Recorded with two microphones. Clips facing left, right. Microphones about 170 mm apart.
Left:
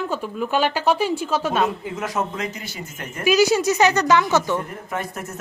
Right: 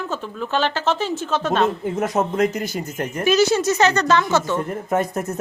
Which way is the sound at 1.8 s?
50° right (ahead or behind).